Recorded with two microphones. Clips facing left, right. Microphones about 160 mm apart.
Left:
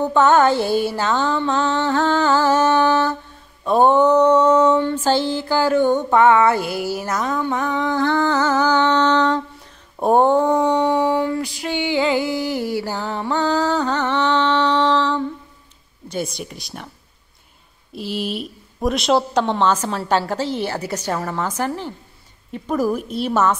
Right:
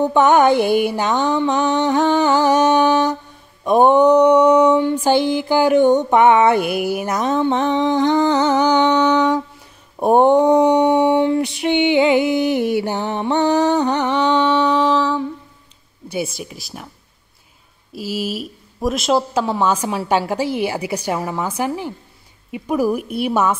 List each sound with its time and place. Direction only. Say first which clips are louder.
0.0 s mantra: right 2 dB; 15° right (ahead or behind)
9.9 s a sound: right 2 dB; 15° right (ahead or behind)
16.1 s speech: right 2 dB; 5° right (ahead or behind)
17.9 s mantra: right 1 dB; 5° right (ahead or behind)